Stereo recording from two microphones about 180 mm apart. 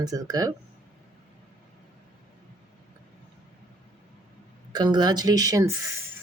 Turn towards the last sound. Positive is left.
turn(degrees=-20)  # may be behind; listen again after turning